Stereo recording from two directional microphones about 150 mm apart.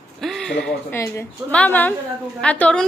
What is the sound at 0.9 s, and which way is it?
A woman's voice, 20° left (ahead or behind).